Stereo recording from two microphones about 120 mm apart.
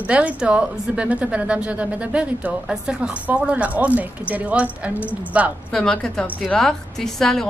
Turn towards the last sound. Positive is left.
turn(degrees=5)  # may be behind; listen again after turning